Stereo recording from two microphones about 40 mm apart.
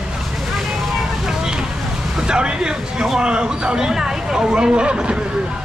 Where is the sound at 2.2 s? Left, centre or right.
Right.